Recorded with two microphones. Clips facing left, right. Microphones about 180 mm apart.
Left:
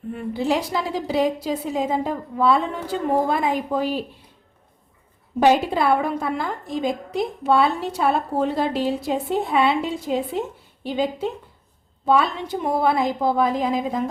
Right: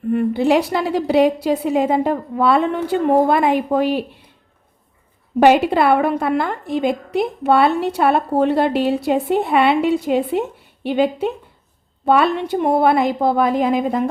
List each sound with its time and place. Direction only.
0.1 s a woman's voice: 65° right (ahead or behind)
5.4 s a woman's voice: 70° right (ahead or behind)